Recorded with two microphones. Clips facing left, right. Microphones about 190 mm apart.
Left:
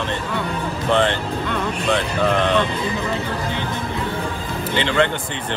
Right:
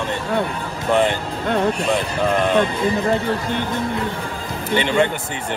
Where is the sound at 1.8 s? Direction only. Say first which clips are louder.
Even; 10° right (ahead or behind).